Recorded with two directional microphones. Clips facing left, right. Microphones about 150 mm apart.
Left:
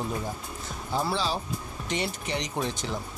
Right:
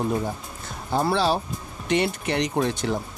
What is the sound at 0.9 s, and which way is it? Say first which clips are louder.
Speech: right 6 dB; 55° right (ahead or behind).